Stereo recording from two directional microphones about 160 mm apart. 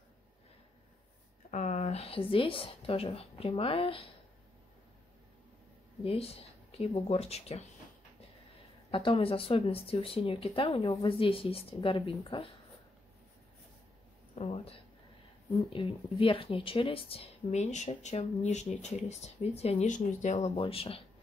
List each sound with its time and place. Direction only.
1.5 s speech: 50° left (ahead or behind)
6.0 s speech: 40° left (ahead or behind)
8.9 s speech: 35° left (ahead or behind)
14.3 s speech: 40° left (ahead or behind)
20.5 s speech: 35° left (ahead or behind)